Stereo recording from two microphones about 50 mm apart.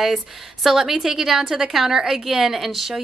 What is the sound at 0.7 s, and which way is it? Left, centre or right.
A woman's voice, centre.